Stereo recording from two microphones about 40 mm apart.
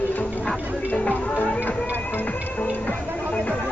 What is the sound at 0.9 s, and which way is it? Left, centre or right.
Music, left.